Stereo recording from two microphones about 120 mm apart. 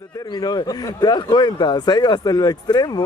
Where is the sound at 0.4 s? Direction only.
35° left (ahead or behind).